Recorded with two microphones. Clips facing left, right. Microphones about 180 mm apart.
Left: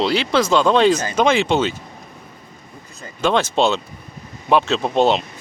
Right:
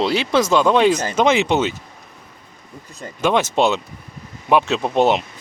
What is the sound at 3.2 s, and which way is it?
Speech, 20° right (ahead or behind).